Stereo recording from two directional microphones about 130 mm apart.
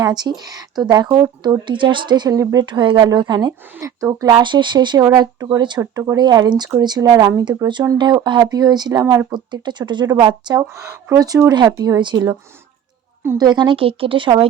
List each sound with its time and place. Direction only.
0.0 s speech: 35° right (ahead or behind)
5.8 s speech: 20° right (ahead or behind)
11.9 s speech: 35° right (ahead or behind)
13.4 s speech: 35° right (ahead or behind)